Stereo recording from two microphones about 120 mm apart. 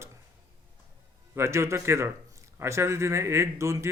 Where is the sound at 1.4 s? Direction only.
25° right (ahead or behind).